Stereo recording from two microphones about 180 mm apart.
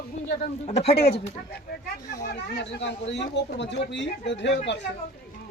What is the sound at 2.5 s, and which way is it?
Speech, 75° left (ahead or behind).